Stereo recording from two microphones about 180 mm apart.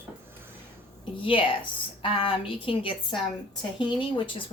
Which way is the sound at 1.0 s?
30° left (ahead or behind).